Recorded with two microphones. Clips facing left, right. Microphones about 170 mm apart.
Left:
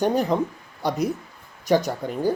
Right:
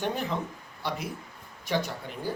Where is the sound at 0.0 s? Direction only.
40° left (ahead or behind).